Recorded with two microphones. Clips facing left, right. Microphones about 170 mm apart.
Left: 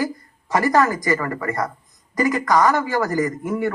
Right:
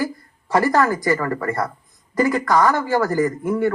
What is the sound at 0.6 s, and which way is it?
Speech, 15° left (ahead or behind).